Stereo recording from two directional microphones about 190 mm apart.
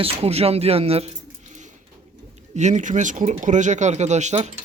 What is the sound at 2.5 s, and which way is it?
Speech, 35° right (ahead or behind).